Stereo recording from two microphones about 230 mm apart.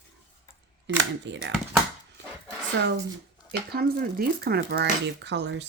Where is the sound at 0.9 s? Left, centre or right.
Right.